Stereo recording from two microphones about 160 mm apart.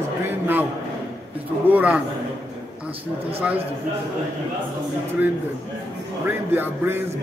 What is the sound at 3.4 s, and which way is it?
Speech, 10° right (ahead or behind).